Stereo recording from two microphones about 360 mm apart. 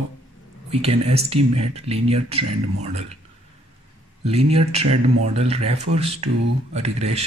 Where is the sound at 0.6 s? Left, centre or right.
Centre.